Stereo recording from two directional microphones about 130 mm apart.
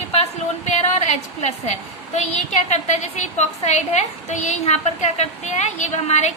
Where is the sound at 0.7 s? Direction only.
60° left (ahead or behind).